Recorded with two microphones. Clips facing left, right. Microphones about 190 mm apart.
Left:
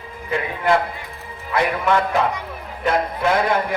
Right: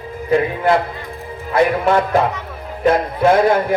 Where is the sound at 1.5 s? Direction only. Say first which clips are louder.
Right 5 dB; 45° right (ahead or behind).